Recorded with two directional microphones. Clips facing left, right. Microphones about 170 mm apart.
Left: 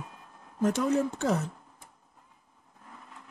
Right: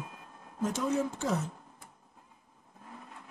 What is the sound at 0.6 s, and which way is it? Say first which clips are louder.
Speech: left 4 dB; 65° left (ahead or behind).